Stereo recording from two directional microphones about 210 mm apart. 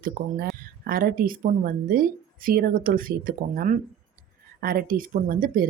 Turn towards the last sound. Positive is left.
turn(degrees=-40)  # may be behind; listen again after turning